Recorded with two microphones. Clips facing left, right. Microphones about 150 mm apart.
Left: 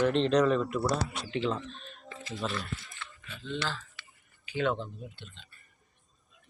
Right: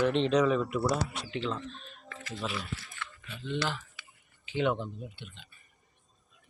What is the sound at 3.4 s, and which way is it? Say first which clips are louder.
Speech: right 2 dB; 15° right (ahead or behind).